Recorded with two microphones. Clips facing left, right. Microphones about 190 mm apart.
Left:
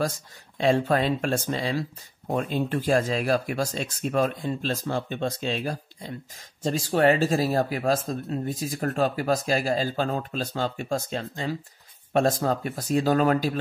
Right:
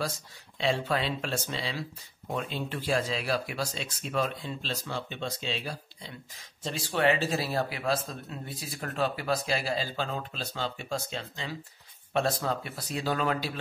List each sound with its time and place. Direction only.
0.6 s speech: 45° left (ahead or behind)